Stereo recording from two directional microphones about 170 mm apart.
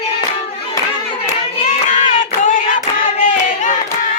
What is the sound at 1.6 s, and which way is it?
Child singing, 45° left (ahead or behind).